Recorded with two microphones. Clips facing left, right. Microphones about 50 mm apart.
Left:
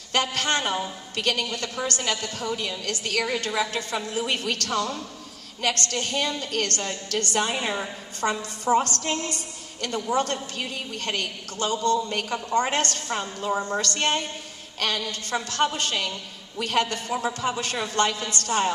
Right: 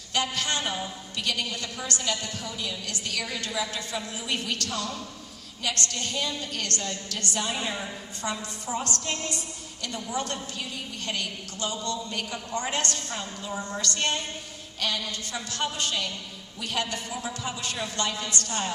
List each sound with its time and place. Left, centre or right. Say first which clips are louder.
0.1 s a woman's voice: left 4 dB; left
7.7 s a woman's voice: left 4 dB; left
8.7 s a woman's voice: left 11 dB; left
9.0 s a woman's voice: left 4 dB; left